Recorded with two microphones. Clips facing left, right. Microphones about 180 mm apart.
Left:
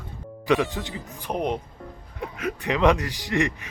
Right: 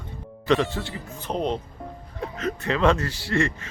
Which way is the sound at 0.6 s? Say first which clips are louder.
Right 1 dB; 15° left (ahead or behind).